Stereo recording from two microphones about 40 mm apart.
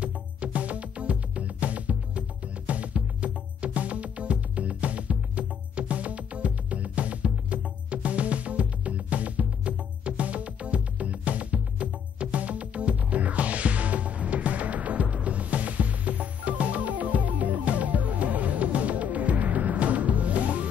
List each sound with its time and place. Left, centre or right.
0.0 s music: right